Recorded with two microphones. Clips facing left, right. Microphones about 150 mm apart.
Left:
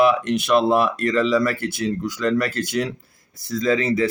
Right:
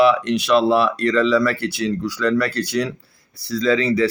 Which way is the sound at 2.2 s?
20° left (ahead or behind).